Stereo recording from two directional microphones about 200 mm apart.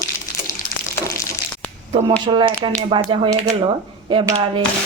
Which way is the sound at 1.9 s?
25° right (ahead or behind).